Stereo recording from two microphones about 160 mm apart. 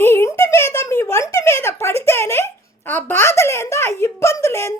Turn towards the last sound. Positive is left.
turn(degrees=15)  # may be behind; listen again after turning